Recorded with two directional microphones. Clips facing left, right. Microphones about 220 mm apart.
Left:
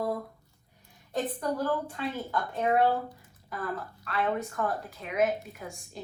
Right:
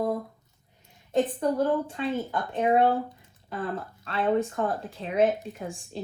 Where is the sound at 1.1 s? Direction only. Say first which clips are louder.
Right 6 dB; 25° right (ahead or behind).